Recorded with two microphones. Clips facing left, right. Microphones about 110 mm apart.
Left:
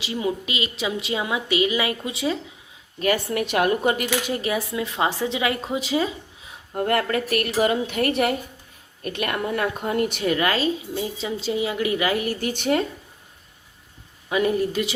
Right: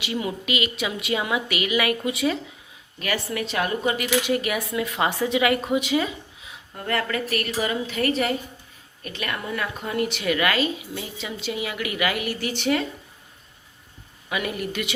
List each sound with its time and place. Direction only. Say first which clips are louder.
0.0 s a woman's voice: left 2 dB; 25° left (ahead or behind)
3.0 s a woman's voice: left 5 dB; 45° left (ahead or behind)
3.4 s a woman's voice: left 5 dB; 55° left (ahead or behind)
4.3 s a woman's voice: right 1 dB; 30° left (ahead or behind)
6.7 s a woman's voice: left 4 dB; 50° left (ahead or behind)
10.3 s a woman's voice: even; 30° left (ahead or behind)
14.3 s a woman's voice: left 7 dB; 30° left (ahead or behind)